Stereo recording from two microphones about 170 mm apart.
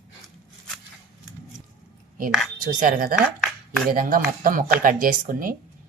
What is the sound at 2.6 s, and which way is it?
A woman's voice, 50° right (ahead or behind).